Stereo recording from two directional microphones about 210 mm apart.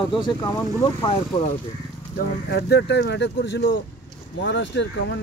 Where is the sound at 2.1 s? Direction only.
50° left (ahead or behind).